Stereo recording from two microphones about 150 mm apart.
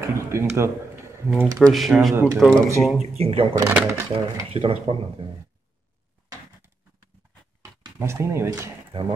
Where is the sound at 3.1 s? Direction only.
40° right (ahead or behind).